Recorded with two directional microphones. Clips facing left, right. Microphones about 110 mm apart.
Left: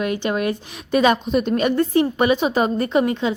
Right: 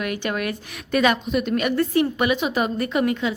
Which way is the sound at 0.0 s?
25° left (ahead or behind).